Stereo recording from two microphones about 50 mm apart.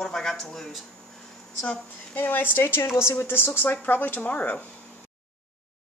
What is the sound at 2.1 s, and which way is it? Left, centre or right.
A woman's voice, left.